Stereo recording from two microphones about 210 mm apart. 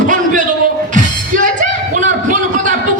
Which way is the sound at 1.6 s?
35° right (ahead or behind).